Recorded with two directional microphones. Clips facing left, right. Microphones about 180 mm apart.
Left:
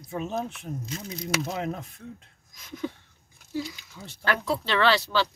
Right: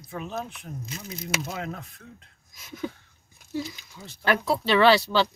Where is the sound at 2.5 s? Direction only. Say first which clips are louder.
Even; 5° right (ahead or behind).